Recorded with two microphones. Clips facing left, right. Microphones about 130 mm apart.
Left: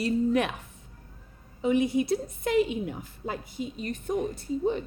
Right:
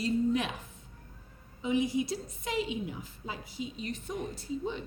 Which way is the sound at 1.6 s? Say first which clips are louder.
Left 5 dB; 60° left (ahead or behind).